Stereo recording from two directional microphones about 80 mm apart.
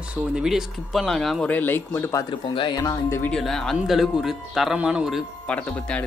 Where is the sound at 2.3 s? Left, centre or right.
Left.